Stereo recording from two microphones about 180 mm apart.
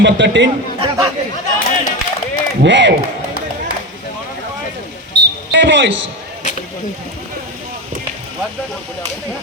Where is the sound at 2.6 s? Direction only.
85° right.